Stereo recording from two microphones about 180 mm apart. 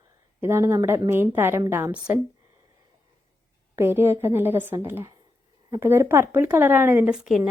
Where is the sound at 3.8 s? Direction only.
15° right (ahead or behind).